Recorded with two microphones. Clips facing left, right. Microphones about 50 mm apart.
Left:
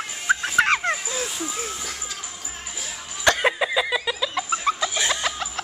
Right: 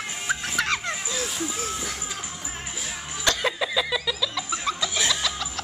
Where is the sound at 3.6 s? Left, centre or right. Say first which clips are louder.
Left 3 dB; centre.